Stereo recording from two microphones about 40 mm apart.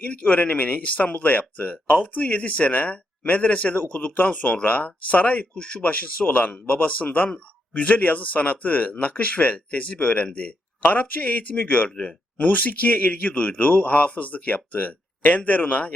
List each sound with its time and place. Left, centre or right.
0.0 s speech: left